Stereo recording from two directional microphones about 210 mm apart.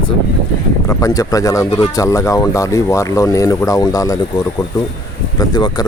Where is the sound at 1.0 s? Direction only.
15° left (ahead or behind).